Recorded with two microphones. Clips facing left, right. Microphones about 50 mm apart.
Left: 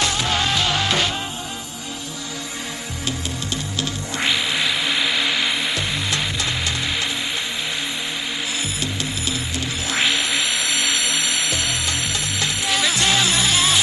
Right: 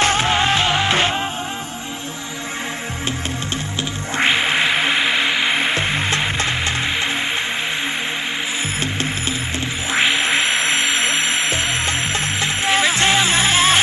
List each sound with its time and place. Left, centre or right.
0.0 s music: right
4.2 s music: right
9.9 s music: right